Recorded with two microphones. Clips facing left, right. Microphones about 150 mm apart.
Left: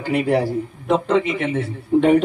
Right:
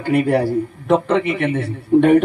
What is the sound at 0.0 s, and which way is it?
Speech, 55° right (ahead or behind).